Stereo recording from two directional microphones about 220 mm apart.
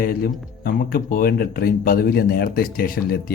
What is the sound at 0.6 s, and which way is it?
A man's voice, 40° left (ahead or behind).